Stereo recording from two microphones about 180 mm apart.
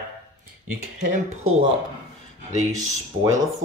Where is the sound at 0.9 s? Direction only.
40° right (ahead or behind).